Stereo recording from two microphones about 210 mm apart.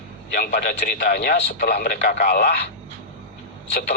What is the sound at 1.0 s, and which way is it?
Speech, 50° left (ahead or behind).